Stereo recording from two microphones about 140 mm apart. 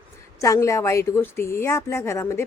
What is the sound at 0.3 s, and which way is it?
A woman's voice, 20° left (ahead or behind).